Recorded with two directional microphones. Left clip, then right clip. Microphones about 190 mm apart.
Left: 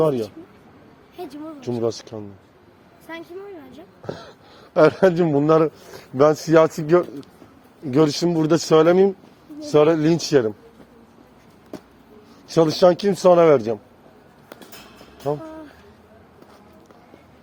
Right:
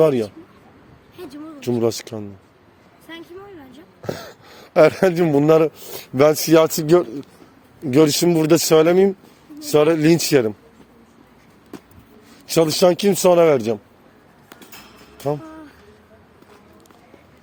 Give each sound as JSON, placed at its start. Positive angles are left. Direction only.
{"t": 0.0, "sound": "a man's voice", "side_deg": -65}
{"t": 1.1, "sound": "a sound", "side_deg": -15}
{"t": 1.6, "sound": "a man's voice", "side_deg": -65}
{"t": 4.0, "sound": "a man's voice", "side_deg": -65}
{"t": 12.5, "sound": "a man's voice", "side_deg": -55}